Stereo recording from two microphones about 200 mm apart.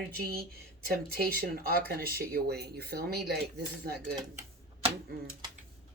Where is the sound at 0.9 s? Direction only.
50° right (ahead or behind).